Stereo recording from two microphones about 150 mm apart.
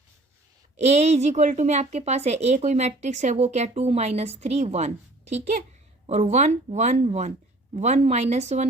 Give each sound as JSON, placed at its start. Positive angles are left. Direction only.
{"t": 0.8, "sound": "a woman's voice", "side_deg": -50}
{"t": 6.1, "sound": "a woman's voice", "side_deg": -50}